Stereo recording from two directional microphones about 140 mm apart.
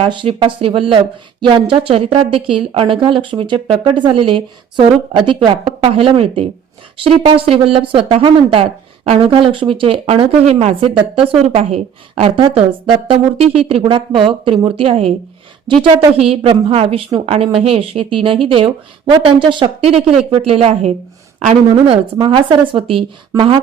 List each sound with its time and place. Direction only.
0.0 s speech: 40° right (ahead or behind)